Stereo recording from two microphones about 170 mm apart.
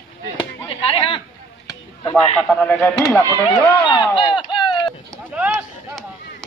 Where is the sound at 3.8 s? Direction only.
25° left (ahead or behind).